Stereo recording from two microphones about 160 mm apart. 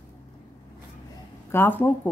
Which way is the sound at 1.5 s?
10° left (ahead or behind).